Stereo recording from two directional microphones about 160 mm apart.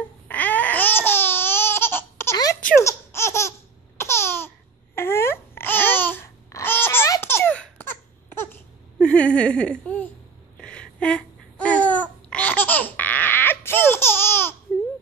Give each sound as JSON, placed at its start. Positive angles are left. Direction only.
{"t": 0.3, "sound": "babbling", "side_deg": 10}
{"t": 2.6, "sound": "laughter", "side_deg": 15}
{"t": 4.9, "sound": "babbling", "side_deg": 15}
{"t": 9.0, "sound": "a sound", "side_deg": 5}
{"t": 10.6, "sound": "babbling", "side_deg": 5}